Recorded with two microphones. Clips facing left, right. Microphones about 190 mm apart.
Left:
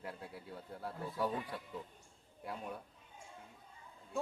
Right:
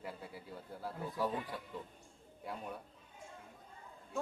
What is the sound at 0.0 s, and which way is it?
A man's voice, centre (ahead or behind).